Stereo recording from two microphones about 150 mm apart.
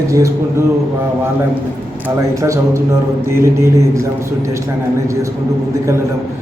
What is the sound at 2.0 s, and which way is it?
A man's voice, 20° right (ahead or behind).